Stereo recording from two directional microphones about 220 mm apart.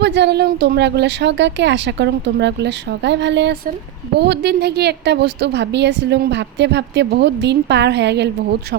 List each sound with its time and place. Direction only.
0.0 s a woman's voice: 50° right (ahead or behind)